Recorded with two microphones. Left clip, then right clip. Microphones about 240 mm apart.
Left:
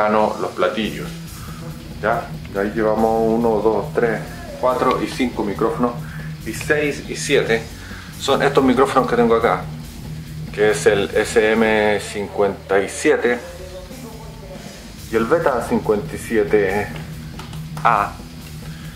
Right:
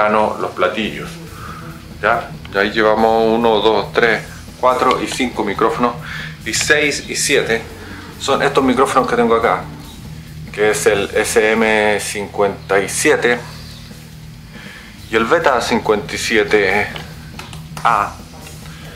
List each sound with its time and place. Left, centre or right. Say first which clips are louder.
0.0 s speech: right 2 dB; centre
5.3 s speech: right 7 dB; left
6.4 s speech: right 5 dB; centre
15.0 s speech: right 4 dB; centre